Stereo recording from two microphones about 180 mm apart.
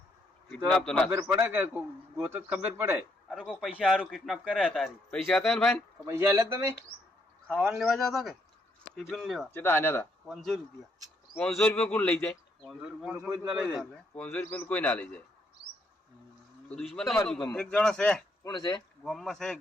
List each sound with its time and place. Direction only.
0.5 s speech: 5° left (ahead or behind)
1.1 s a man's voice: 15° right (ahead or behind)
3.2 s speech: centre (ahead or behind)
6.1 s a man's voice: 15° right (ahead or behind)
9.5 s a man's voice: 10° left (ahead or behind)
11.3 s a man's voice: 5° left (ahead or behind)
16.6 s speech: 5° left (ahead or behind)
18.4 s speech: 25° left (ahead or behind)
19.0 s speech: centre (ahead or behind)